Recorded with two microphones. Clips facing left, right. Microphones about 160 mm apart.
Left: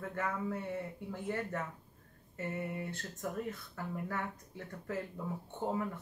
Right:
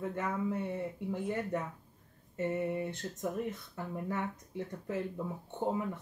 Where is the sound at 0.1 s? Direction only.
20° right (ahead or behind).